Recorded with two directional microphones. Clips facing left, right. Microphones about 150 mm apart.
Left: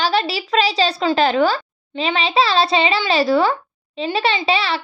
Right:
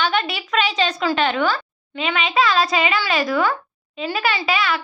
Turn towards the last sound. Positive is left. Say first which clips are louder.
# left 2 dB
turn(degrees=30)  # may be behind; listen again after turning